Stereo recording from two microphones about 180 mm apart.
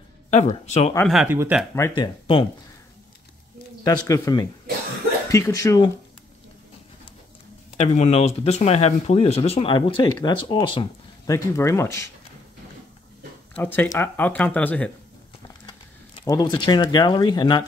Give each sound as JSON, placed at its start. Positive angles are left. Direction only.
{"t": 0.3, "sound": "speech", "side_deg": 40}
{"t": 1.0, "sound": "speech", "side_deg": 0}
{"t": 2.0, "sound": "speech", "side_deg": 30}
{"t": 3.8, "sound": "speech", "side_deg": 20}
{"t": 7.7, "sound": "speech", "side_deg": 35}
{"t": 13.6, "sound": "speech", "side_deg": 10}
{"t": 16.3, "sound": "speech", "side_deg": 25}